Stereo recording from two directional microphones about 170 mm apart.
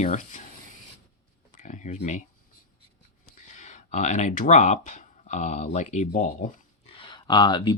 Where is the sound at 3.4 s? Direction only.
45° left (ahead or behind).